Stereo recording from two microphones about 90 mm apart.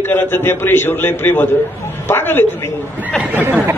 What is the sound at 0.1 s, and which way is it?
A man's voice, 25° left (ahead or behind).